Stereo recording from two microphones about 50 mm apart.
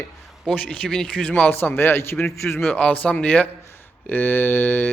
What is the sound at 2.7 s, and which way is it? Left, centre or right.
Speech, left.